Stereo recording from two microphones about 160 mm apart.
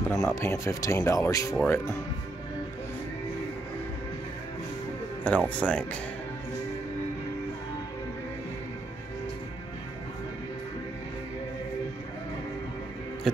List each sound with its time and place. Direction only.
0.1 s speech: 20° left (ahead or behind)
5.2 s speech: 10° left (ahead or behind)